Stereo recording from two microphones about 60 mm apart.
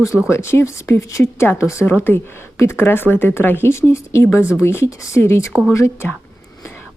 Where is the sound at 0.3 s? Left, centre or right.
Left.